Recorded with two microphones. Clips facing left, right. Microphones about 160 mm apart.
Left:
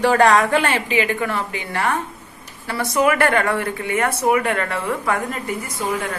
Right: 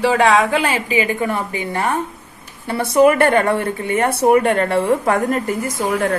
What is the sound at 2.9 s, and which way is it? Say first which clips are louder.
Speech: right 5 dB; 25° right (ahead or behind).